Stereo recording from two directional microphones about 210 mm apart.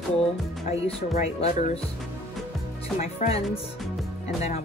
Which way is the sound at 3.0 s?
30° left (ahead or behind).